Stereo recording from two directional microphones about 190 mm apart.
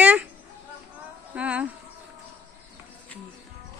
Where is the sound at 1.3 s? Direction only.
5° right (ahead or behind).